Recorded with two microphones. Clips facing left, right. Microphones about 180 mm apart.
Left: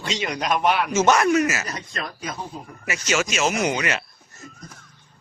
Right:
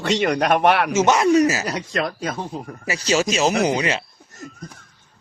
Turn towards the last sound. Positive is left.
turn(degrees=-30)  # may be behind; listen again after turning